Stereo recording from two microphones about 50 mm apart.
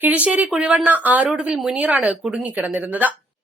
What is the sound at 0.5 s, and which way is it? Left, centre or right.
Speech, centre.